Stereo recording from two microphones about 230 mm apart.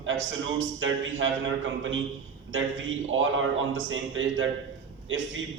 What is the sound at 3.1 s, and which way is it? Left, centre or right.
A man's voice, right.